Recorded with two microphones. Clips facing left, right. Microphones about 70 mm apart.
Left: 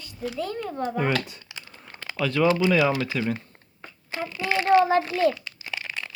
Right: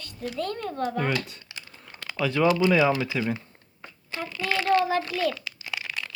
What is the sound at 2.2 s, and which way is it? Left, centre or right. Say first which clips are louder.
Speech: even; centre.